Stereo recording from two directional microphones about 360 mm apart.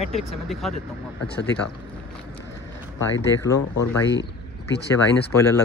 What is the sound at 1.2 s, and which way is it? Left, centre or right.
Speech, left.